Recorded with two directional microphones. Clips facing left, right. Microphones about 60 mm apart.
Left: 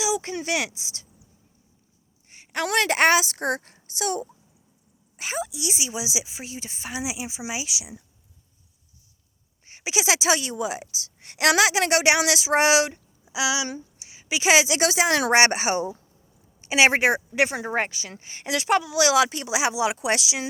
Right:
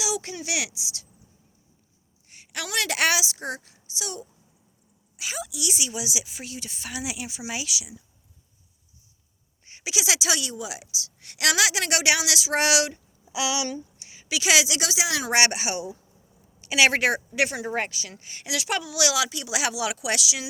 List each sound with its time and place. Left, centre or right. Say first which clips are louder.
0.0 s a woman's voice: left 4 dB; left
2.3 s a sound: left 7 dB; left
2.6 s a woman's voice: left 5 dB; left
9.6 s a woman's voice: left 4 dB; left